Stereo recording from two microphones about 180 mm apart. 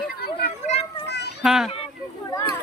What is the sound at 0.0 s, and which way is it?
Children playing, 55° left (ahead or behind).